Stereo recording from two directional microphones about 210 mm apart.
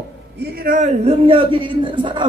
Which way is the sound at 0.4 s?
45° right (ahead or behind).